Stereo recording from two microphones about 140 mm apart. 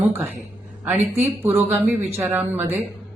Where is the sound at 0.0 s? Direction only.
15° right (ahead or behind).